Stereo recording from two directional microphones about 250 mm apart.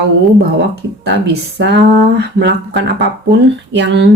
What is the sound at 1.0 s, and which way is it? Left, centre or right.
Speech, right.